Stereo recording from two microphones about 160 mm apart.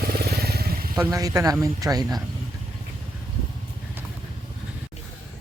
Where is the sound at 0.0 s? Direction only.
75° right (ahead or behind).